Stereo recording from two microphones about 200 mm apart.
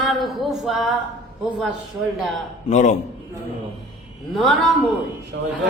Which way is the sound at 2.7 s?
40° left (ahead or behind).